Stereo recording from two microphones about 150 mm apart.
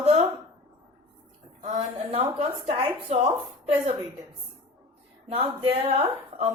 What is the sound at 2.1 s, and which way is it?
A woman's voice, 40° right (ahead or behind).